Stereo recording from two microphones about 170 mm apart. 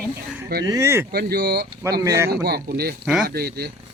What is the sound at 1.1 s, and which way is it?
Speech, 65° right (ahead or behind).